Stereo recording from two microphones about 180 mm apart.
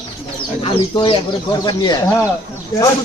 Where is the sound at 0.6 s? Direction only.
30° left (ahead or behind).